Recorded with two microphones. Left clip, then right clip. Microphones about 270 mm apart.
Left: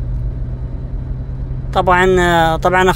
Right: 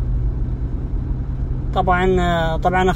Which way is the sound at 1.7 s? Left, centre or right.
Left.